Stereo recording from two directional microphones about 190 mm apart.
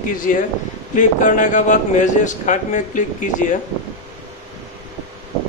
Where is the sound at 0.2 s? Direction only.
45° left (ahead or behind).